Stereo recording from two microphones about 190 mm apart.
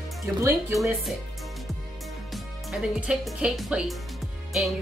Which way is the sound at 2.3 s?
5° right (ahead or behind).